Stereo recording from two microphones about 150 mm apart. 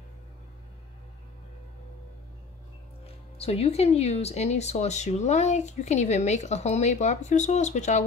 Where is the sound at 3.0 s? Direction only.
40° left (ahead or behind).